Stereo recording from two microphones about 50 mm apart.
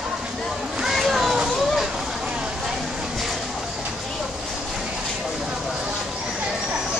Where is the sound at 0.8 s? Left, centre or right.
Centre.